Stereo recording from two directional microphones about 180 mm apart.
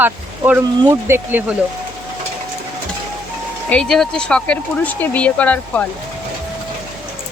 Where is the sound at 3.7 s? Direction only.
5° left (ahead or behind).